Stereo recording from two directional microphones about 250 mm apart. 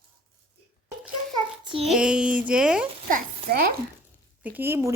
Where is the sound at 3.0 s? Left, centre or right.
Right.